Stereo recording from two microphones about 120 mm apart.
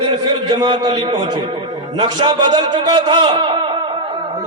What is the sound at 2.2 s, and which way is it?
A man's voice, 40° right (ahead or behind).